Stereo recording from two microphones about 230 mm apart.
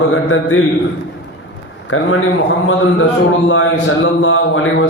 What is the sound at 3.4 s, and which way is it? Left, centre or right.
Speech, left.